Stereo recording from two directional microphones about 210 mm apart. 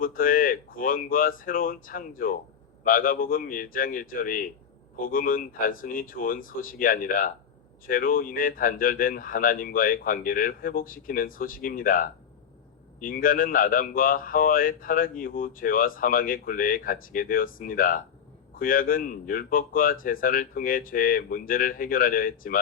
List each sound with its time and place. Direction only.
0.0 s speech: 40° left (ahead or behind)